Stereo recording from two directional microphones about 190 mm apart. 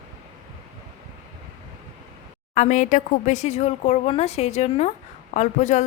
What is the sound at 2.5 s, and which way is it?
A woman's voice, 40° left (ahead or behind).